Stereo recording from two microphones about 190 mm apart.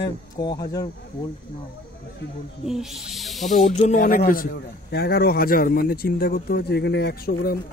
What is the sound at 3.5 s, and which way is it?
Speech, 40° left (ahead or behind).